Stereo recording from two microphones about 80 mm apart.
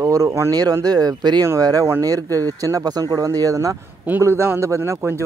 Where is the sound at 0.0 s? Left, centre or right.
Right.